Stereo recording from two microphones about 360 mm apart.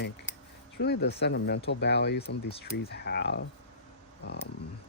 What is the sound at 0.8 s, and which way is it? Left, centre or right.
Speech, left.